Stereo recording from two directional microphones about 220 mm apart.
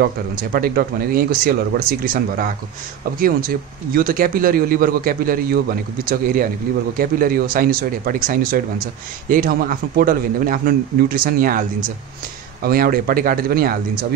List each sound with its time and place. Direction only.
0.0 s speech: 40° right (ahead or behind)
7.0 s speech: 40° right (ahead or behind)
12.6 s speech: 40° right (ahead or behind)